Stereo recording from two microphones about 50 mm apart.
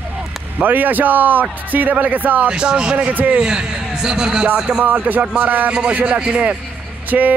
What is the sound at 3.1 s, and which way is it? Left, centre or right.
Speech, right.